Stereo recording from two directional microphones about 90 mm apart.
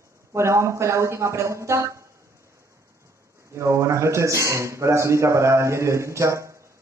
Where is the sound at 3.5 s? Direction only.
35° right (ahead or behind).